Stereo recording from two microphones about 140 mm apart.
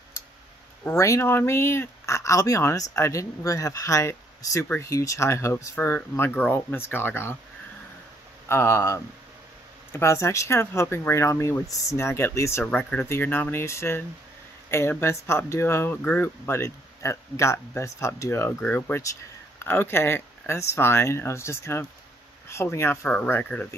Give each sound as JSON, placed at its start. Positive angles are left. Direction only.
{"t": 0.8, "sound": "speech", "side_deg": 20}
{"t": 8.5, "sound": "speech", "side_deg": 15}